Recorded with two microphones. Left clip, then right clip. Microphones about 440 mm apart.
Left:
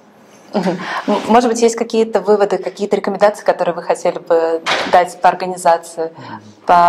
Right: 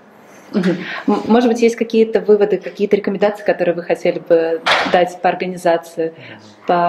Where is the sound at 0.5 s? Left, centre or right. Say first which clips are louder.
Left 1 dB; left.